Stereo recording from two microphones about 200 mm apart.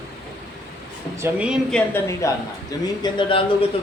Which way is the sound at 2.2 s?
15° left (ahead or behind).